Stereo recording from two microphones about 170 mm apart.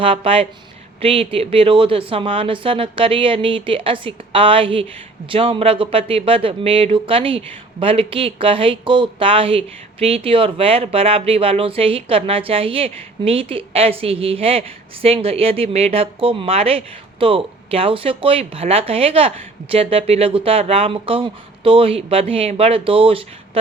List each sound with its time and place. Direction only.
0.0 s speech: 35° right (ahead or behind)